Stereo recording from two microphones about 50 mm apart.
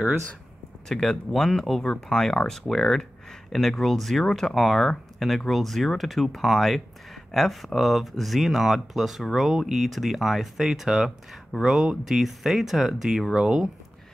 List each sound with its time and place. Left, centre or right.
0.8 s speech: centre
13.3 s speech: centre